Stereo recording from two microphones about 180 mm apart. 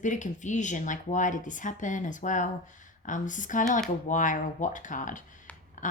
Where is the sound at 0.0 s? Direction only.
45° left (ahead or behind).